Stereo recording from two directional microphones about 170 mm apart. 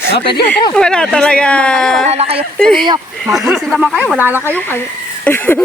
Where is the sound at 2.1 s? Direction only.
35° right (ahead or behind).